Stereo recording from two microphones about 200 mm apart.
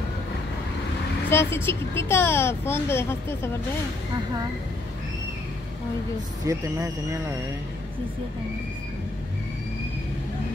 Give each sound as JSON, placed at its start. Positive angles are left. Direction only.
{"t": 1.3, "sound": "speech", "side_deg": 10}
{"t": 6.4, "sound": "speech", "side_deg": -15}